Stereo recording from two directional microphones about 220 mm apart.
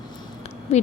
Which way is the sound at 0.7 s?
30° left (ahead or behind).